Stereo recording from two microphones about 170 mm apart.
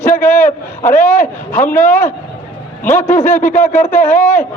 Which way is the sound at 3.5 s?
50° left (ahead or behind).